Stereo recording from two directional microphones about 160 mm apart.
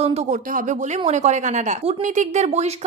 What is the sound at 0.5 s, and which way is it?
A woman's voice, 50° right (ahead or behind).